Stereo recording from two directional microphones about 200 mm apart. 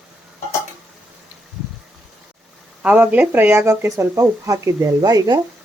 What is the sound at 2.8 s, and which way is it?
Speech, 10° right (ahead or behind).